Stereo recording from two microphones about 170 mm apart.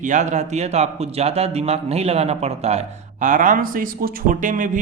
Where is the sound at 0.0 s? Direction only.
45° right (ahead or behind).